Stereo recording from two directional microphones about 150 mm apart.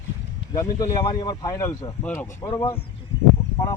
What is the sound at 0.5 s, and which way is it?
Speech, 20° left (ahead or behind).